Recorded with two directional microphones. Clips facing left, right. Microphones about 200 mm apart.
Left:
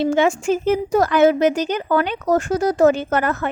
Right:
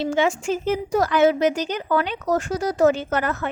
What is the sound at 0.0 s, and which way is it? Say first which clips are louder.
Speech: left 4 dB; 50° left (ahead or behind).